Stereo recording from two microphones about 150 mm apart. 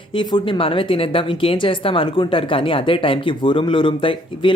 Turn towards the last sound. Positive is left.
turn(degrees=35)  # may be behind; listen again after turning